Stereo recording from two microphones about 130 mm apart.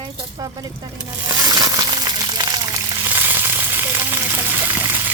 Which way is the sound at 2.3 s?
30° right (ahead or behind).